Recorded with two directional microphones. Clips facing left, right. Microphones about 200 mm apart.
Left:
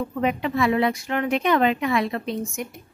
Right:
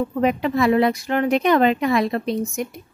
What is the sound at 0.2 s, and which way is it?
A woman's voice, 40° right (ahead or behind).